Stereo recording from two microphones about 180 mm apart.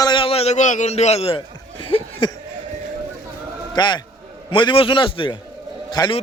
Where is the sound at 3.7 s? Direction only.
25° left (ahead or behind).